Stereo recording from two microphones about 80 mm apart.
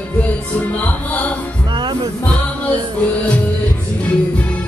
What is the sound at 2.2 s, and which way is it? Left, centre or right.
Music, centre.